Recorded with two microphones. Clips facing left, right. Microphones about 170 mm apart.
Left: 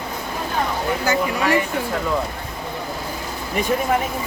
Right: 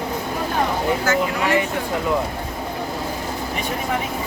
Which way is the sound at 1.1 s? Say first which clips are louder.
Left 1 dB; 15° left (ahead or behind).